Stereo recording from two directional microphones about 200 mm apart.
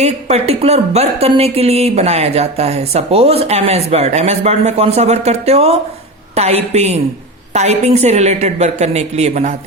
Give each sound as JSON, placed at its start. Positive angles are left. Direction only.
{"t": 0.0, "sound": "a woman's voice", "side_deg": -35}